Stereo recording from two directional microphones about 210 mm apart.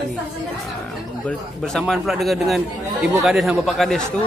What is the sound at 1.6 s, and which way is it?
Speech, centre (ahead or behind).